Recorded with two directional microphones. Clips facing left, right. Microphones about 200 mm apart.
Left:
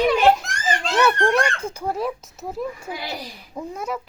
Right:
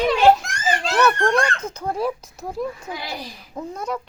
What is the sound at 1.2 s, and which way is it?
Speech, 10° left (ahead or behind).